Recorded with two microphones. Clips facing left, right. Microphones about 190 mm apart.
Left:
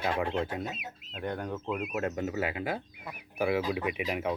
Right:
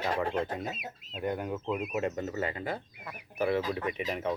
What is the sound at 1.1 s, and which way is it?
Speech, 5° right (ahead or behind).